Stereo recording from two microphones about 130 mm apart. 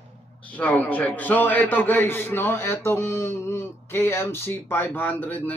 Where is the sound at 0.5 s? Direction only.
10° left (ahead or behind).